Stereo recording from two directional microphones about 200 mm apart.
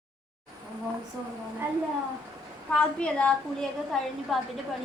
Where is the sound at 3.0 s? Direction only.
5° left (ahead or behind).